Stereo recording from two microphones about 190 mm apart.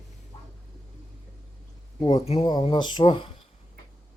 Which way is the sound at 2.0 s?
25° left (ahead or behind).